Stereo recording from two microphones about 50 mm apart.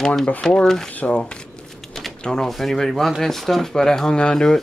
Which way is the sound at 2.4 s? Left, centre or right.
Centre.